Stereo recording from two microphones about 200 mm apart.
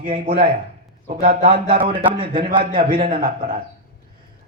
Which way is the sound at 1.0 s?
45° right (ahead or behind).